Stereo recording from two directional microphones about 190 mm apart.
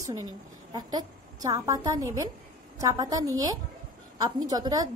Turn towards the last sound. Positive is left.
turn(degrees=-20)  # may be behind; listen again after turning